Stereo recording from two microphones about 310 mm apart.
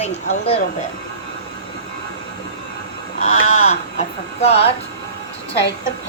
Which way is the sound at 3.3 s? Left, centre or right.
Left.